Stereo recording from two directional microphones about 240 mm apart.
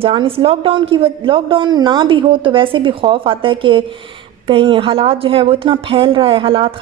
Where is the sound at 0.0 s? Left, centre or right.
Right.